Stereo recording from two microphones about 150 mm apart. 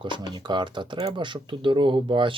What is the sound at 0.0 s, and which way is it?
Speech, 30° right (ahead or behind).